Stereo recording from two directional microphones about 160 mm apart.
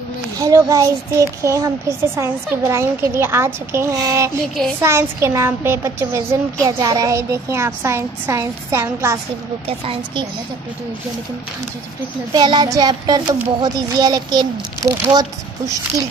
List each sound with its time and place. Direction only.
0.4 s a child's voice: 20° right (ahead or behind)
9.7 s a woman's voice: 35° right (ahead or behind)
12.4 s a child's voice: 30° right (ahead or behind)